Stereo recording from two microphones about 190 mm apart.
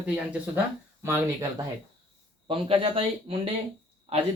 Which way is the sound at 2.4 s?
30° right (ahead or behind).